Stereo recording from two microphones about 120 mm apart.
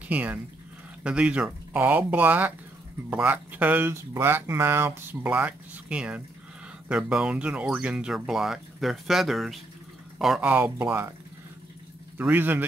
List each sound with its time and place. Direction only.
0.1 s speech: 15° right (ahead or behind)
10.5 s speech: 20° right (ahead or behind)
12.2 s speech: 15° right (ahead or behind)